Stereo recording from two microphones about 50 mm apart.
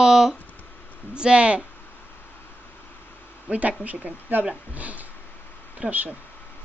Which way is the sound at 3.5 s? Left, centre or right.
Right.